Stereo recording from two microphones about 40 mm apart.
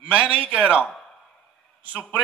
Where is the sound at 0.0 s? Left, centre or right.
Right.